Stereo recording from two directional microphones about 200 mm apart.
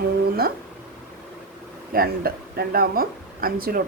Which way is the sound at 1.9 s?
50° right (ahead or behind).